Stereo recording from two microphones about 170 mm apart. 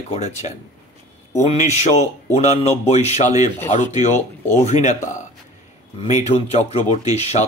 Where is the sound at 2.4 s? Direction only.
40° left (ahead or behind).